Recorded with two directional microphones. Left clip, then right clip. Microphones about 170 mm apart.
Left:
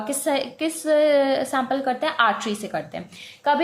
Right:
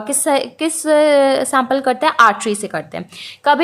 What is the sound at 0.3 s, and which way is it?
A woman's voice, 35° right (ahead or behind).